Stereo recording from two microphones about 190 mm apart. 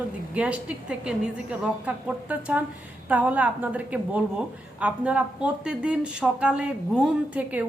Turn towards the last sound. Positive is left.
turn(degrees=-5)  # may be behind; listen again after turning